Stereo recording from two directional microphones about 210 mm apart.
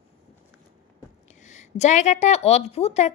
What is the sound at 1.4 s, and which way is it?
A woman's voice, 35° left (ahead or behind).